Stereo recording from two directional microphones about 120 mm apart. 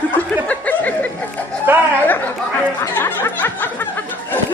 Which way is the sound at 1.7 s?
15° right (ahead or behind).